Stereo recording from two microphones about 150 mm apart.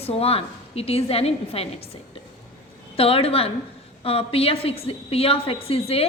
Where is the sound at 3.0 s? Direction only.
40° left (ahead or behind).